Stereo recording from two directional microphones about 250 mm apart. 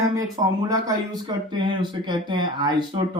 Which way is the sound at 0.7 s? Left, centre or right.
Centre.